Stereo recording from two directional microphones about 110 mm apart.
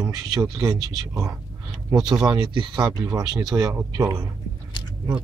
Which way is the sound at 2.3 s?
45° right (ahead or behind).